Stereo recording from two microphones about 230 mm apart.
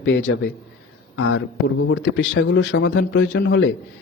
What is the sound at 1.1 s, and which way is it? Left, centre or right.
A man's voice, left.